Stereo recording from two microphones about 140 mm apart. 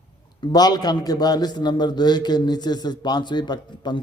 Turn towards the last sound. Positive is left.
turn(degrees=30)  # may be behind; listen again after turning